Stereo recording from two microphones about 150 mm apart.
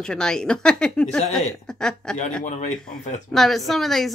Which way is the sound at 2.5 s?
55° left (ahead or behind).